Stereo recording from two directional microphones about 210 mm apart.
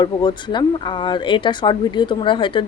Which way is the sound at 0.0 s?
20° left (ahead or behind).